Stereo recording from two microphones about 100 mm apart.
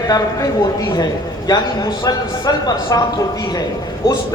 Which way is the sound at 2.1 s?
40° left (ahead or behind).